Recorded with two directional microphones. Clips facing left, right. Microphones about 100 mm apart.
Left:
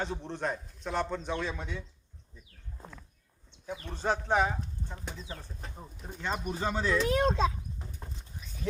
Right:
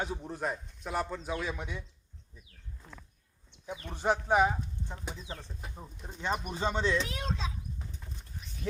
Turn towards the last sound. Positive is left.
turn(degrees=50)  # may be behind; listen again after turning